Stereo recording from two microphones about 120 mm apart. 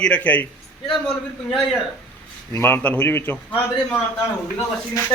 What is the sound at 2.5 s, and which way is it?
Speech, 20° left (ahead or behind).